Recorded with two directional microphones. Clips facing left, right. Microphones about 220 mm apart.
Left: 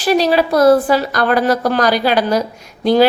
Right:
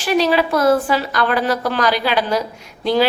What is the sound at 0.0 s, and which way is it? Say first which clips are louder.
A woman's voice: left 3 dB; 35° left (ahead or behind).